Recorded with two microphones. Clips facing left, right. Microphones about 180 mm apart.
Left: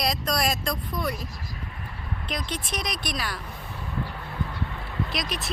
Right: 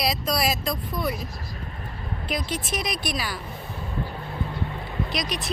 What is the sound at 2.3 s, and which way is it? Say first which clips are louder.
Speech: right 4 dB; 5° right (ahead or behind).